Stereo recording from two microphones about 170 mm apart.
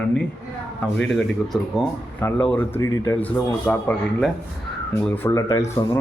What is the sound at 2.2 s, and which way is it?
Speech, 15° left (ahead or behind).